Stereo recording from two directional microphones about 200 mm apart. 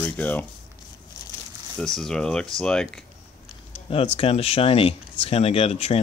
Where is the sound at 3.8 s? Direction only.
30° left (ahead or behind).